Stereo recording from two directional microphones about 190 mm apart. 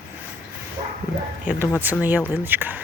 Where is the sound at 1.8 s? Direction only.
10° right (ahead or behind).